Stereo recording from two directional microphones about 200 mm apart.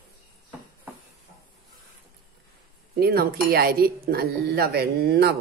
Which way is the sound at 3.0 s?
50° right (ahead or behind).